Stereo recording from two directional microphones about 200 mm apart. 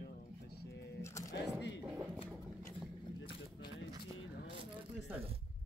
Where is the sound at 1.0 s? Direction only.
15° left (ahead or behind).